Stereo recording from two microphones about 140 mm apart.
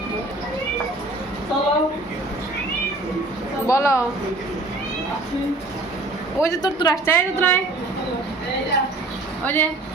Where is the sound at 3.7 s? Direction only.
20° left (ahead or behind).